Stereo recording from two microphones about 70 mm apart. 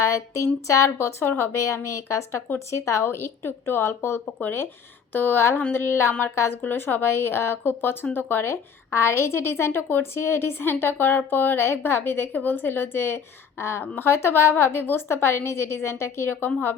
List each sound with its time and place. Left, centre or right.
0.7 s speech: left
1.2 s a woman's voice: left
1.9 s a woman's voice: left
4.4 s a woman's voice: left